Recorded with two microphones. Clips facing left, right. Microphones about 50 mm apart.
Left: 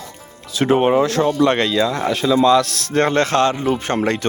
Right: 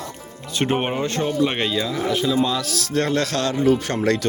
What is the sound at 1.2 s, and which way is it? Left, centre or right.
Speech, left.